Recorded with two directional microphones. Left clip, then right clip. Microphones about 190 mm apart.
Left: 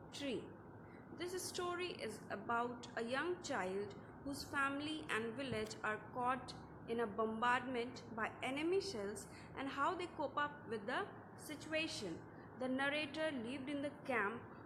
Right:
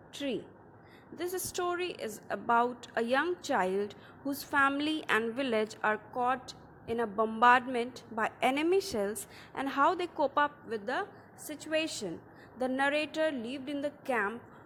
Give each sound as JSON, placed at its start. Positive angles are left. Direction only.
{"t": 0.1, "sound": "a woman's voice", "side_deg": -35}